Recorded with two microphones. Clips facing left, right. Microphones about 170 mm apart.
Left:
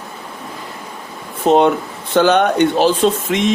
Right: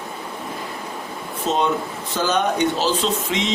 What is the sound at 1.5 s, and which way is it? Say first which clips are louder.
Speech: left 9 dB; 60° left (ahead or behind).